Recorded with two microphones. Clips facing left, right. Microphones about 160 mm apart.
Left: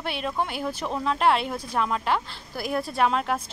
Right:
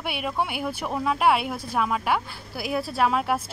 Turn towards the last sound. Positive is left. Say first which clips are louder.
# right 1 dB
turn(degrees=-5)  # may be behind; listen again after turning